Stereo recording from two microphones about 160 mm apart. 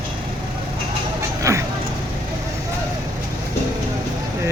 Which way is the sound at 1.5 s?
20° right (ahead or behind).